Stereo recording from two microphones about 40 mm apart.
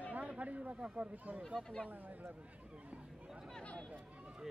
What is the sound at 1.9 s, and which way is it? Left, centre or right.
Speech, right.